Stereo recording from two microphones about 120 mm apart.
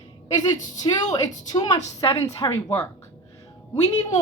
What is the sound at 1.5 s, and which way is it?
A woman's voice, 30° left (ahead or behind).